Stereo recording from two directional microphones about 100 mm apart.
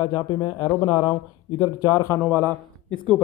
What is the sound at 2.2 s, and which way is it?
Speech, 15° left (ahead or behind).